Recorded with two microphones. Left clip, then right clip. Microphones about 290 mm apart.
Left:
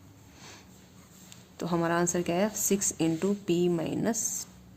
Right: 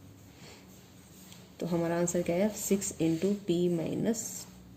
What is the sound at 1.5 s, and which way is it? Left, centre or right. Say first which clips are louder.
Speech: left 3 dB; left.